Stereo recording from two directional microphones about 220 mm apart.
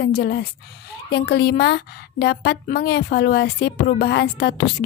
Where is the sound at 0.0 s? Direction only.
45° left (ahead or behind).